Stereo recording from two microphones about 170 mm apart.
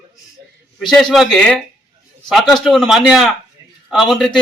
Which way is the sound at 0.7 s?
5° left (ahead or behind).